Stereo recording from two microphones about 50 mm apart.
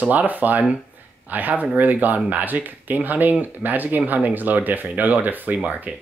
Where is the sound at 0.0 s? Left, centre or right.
Right.